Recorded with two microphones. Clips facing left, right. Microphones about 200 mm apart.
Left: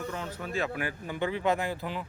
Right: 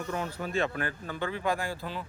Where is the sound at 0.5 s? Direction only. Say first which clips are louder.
Right 1 dB; 5° left (ahead or behind).